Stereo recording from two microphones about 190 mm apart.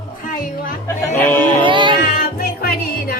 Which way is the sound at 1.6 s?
25° right (ahead or behind).